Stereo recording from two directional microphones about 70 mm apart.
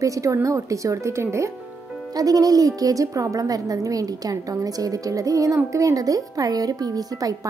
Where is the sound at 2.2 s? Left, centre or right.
Right.